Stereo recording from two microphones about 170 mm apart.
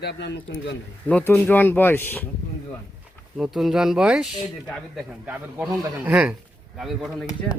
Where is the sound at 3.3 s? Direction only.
Centre (ahead or behind).